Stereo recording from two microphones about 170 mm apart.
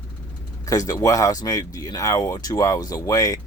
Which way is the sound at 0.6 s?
20° left (ahead or behind).